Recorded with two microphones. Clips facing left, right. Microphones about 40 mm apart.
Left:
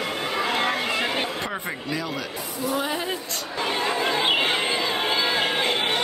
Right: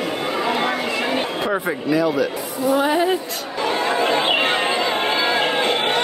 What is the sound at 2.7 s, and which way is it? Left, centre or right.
Speech, centre.